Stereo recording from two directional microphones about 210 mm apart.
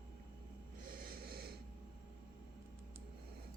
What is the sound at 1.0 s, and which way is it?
Snort, 45° right (ahead or behind).